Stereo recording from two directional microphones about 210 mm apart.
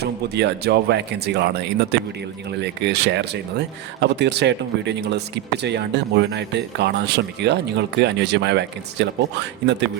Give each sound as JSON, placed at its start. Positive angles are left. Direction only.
{"t": 0.0, "sound": "speech", "side_deg": -50}